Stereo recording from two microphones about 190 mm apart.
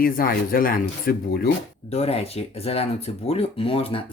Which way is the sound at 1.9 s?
30° left (ahead or behind).